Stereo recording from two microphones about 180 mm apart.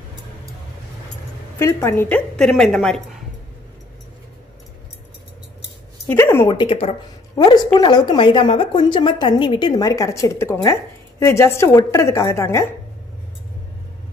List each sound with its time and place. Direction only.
1.6 s a woman's voice: 15° left (ahead or behind)
6.0 s a woman's voice: 15° left (ahead or behind)
6.5 s speech: 30° left (ahead or behind)
7.3 s a woman's voice: 20° left (ahead or behind)